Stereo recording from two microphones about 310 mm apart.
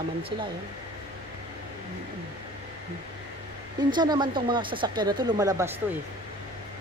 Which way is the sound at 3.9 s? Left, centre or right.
Centre.